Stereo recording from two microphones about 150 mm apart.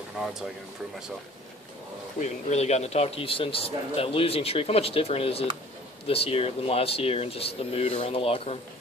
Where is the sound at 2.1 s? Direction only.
50° left (ahead or behind).